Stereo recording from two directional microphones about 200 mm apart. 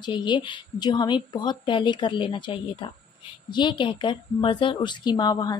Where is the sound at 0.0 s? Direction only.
20° left (ahead or behind).